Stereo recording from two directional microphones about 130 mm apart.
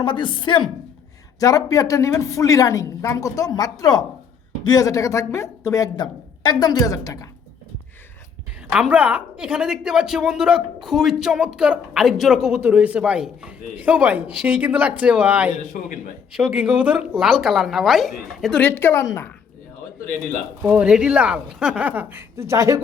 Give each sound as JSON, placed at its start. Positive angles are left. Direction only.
{"t": 0.0, "sound": "a woman's voice", "side_deg": 35}
{"t": 1.4, "sound": "a woman's voice", "side_deg": 25}
{"t": 8.7, "sound": "a woman's voice", "side_deg": -10}
{"t": 15.5, "sound": "a man's voice", "side_deg": 80}
{"t": 16.3, "sound": "a woman's voice", "side_deg": -5}
{"t": 18.6, "sound": "a woman's voice", "side_deg": 15}
{"t": 20.6, "sound": "a woman's voice", "side_deg": -10}